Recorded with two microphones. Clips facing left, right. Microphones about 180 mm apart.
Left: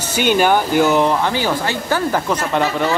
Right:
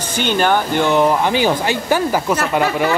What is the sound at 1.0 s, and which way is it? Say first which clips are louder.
Speech: right 2 dB; 15° right (ahead or behind).